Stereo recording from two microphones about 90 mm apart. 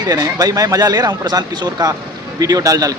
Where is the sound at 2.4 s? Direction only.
40° right (ahead or behind).